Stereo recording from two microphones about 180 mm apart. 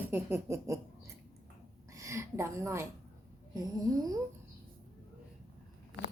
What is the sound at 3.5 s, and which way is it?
Snoring, 20° right (ahead or behind).